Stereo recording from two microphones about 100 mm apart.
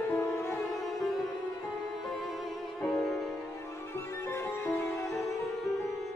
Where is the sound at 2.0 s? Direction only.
Centre (ahead or behind).